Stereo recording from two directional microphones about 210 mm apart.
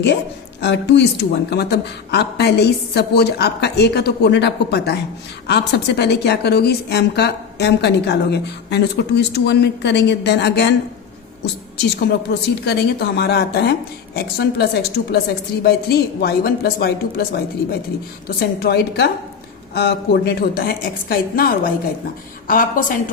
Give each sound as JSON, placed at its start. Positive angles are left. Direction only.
{"t": 0.6, "sound": "a woman's voice", "side_deg": 55}
{"t": 11.9, "sound": "a woman's voice", "side_deg": 50}